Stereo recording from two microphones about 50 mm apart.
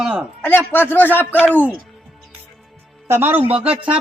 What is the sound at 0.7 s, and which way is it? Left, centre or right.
Speech, left.